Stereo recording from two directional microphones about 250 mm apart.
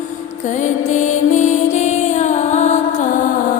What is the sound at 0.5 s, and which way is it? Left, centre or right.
Music, left.